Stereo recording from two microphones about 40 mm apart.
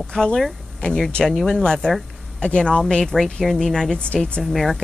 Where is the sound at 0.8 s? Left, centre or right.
Left.